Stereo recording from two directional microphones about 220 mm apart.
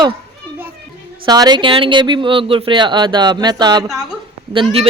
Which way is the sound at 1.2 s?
20° right (ahead or behind).